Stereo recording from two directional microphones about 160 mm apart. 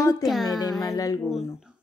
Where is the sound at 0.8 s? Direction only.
20° left (ahead or behind).